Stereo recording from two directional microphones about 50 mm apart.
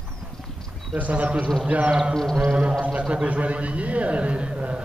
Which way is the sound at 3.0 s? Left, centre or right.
Right.